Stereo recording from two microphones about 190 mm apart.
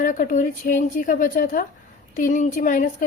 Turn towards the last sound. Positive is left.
turn(degrees=45)  # may be behind; listen again after turning